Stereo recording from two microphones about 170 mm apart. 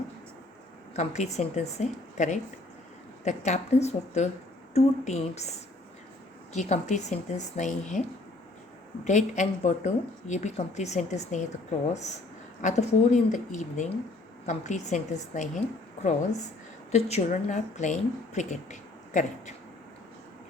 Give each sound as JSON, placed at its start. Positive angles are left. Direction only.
{"t": 0.9, "sound": "a woman's voice", "side_deg": 40}
{"t": 9.0, "sound": "a woman's voice", "side_deg": 45}
{"t": 12.6, "sound": "a woman's voice", "side_deg": 40}
{"t": 16.9, "sound": "a woman's voice", "side_deg": 40}